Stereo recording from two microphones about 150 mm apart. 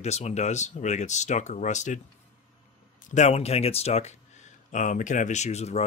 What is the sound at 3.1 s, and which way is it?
Speech, 50° left (ahead or behind).